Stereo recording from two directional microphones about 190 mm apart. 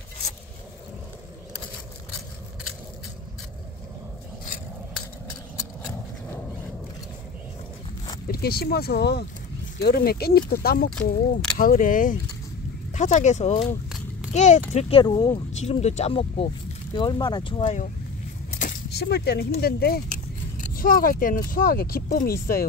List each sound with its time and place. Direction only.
8.3 s a child's voice: 55° left (ahead or behind); by 15.4 s 20° left (ahead or behind)
15.5 s speech: 35° left (ahead or behind)
18.5 s a sound: 45° left (ahead or behind)
18.9 s speech: 60° left (ahead or behind)